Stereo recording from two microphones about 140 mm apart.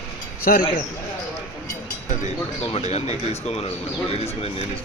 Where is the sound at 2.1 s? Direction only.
60° left (ahead or behind).